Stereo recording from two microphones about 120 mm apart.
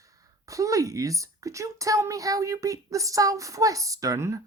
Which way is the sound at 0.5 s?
25° right (ahead or behind).